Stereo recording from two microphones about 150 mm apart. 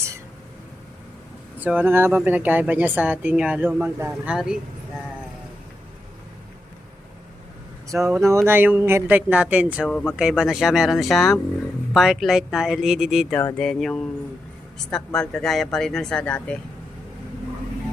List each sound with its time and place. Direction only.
1.5 s speech: 10° right (ahead or behind)
7.9 s speech: 20° right (ahead or behind)
9.9 s speech: 10° left (ahead or behind)
10.2 s speech: 5° right (ahead or behind)